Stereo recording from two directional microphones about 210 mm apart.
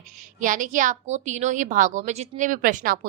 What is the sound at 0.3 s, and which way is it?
A woman's voice, 40° right (ahead or behind).